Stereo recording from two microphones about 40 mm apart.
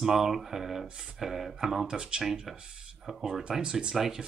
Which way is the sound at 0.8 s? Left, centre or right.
Right.